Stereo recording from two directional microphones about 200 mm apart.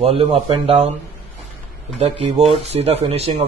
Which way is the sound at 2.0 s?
30° right (ahead or behind).